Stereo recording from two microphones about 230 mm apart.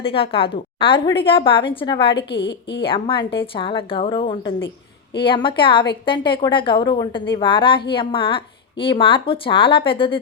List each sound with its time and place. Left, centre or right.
0.0 s a woman's voice: left
2.1 s a woman's voice: left
2.8 s a woman's voice: left